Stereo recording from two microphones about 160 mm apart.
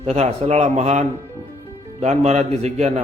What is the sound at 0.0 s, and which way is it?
A man's voice, 45° right (ahead or behind).